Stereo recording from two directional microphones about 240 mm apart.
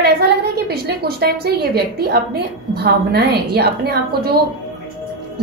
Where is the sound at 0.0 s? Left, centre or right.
Right.